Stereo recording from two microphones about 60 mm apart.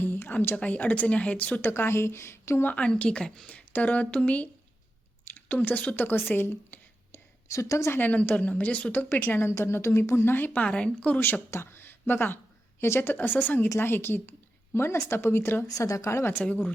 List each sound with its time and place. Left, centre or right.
0.0 s speech: left
1.6 s a woman's voice: left
2.7 s speech: centre
3.5 s speech: left
5.5 s speech: left
7.5 s speech: left
7.9 s speech: left
9.0 s speech: left
9.5 s a woman's voice: left
10.3 s speech: left
10.6 s speech: centre
11.5 s a woman's voice: left
15.6 s speech: left